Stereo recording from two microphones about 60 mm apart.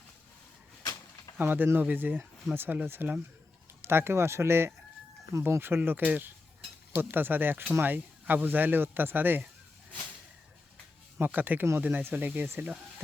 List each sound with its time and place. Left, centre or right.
1.4 s speech: right
11.3 s speech: right